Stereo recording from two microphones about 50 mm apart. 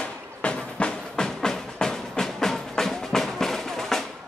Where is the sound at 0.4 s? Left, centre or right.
Left.